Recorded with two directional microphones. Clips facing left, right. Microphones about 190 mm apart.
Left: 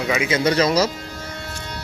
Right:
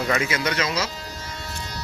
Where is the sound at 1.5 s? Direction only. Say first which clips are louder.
Left 2 dB; 55° left (ahead or behind).